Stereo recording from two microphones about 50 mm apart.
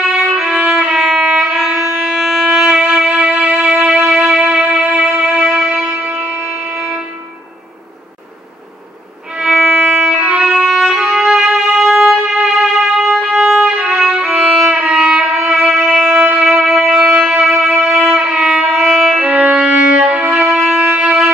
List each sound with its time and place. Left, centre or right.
0.1 s music: centre
0.5 s violin: centre
2.0 s music: centre; by 3.5 s right
3.5 s music: centre
6.2 s a sound: right
9.4 s violin: right
10.1 s violin: centre
10.4 s violin: centre
14.7 s violin: centre
16.2 s music: right
16.5 s music: centre
18.1 s music: right; by 19.1 s centre
19.1 s music: right